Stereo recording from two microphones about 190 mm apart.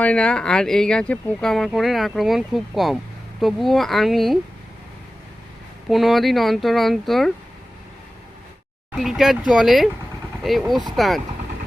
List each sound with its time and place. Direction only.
0.0 s speech: 5° left (ahead or behind)
5.9 s speech: centre (ahead or behind)
8.9 s speech: centre (ahead or behind)